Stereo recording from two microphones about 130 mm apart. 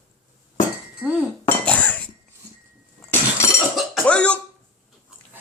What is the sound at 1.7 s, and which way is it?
Dishes, 10° left (ahead or behind).